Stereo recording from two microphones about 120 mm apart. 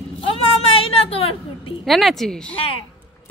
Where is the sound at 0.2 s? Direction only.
50° left (ahead or behind).